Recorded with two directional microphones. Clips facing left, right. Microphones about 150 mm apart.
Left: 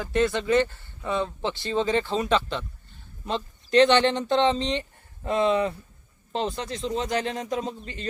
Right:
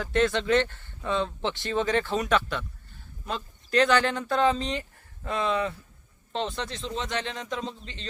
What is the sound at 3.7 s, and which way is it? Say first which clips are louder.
Speech: left 4 dB; 30° left (ahead or behind).